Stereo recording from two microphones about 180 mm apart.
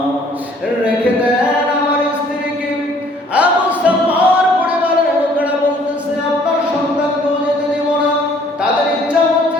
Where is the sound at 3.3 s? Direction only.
10° right (ahead or behind).